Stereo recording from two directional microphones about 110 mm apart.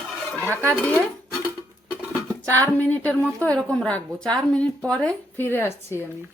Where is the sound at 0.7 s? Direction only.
15° left (ahead or behind).